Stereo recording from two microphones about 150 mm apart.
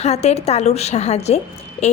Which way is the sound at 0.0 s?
45° left (ahead or behind).